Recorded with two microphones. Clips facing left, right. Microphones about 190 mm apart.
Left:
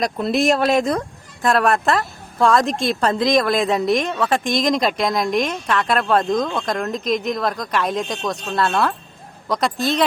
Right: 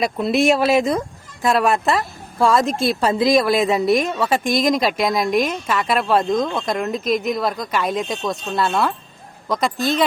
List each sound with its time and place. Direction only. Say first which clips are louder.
0.0 s speech: right 1 dB; centre (ahead or behind)